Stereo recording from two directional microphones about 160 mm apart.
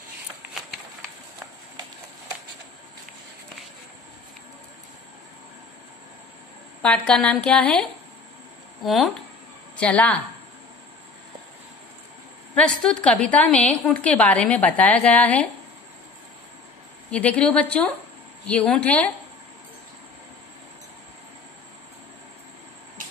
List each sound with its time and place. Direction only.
6.8 s a woman's voice: 5° left (ahead or behind)
12.5 s a woman's voice: 5° left (ahead or behind)
17.1 s a woman's voice: 10° left (ahead or behind)